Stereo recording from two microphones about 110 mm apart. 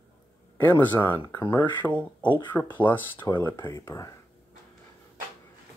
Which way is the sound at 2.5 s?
15° left (ahead or behind).